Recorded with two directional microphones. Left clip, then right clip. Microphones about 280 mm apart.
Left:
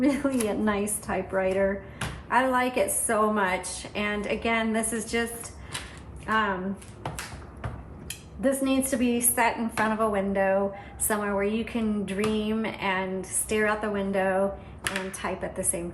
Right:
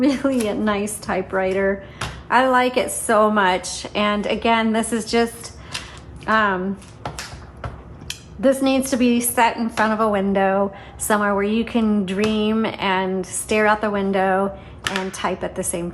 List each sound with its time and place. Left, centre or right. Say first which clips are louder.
0.0 s speech: right 6 dB; centre
8.0 s speech: right 9 dB; centre